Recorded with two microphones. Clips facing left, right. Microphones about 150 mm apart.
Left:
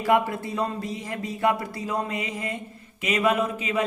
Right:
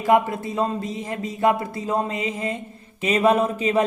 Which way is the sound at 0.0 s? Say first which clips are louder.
Right 3 dB; 20° right (ahead or behind).